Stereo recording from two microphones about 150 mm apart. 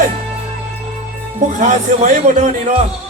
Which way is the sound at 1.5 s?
55° right (ahead or behind).